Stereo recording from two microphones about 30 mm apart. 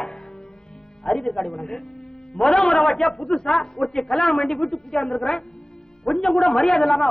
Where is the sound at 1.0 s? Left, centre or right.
Left.